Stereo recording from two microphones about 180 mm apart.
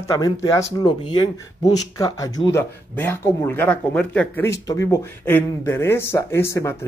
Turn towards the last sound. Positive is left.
turn(degrees=15)  # may be behind; listen again after turning